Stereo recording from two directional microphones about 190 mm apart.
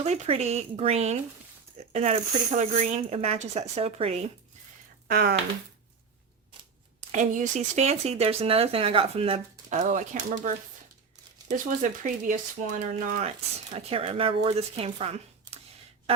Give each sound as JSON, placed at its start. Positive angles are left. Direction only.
{"t": 0.0, "sound": "speech", "side_deg": -35}
{"t": 5.0, "sound": "speech", "side_deg": -55}
{"t": 7.1, "sound": "speech", "side_deg": -40}
{"t": 11.4, "sound": "speech", "side_deg": -40}